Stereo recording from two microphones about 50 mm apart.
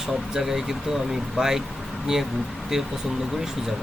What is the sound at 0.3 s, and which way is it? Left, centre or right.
Speech, centre.